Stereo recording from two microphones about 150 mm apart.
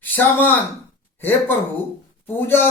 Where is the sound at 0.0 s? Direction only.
10° left (ahead or behind).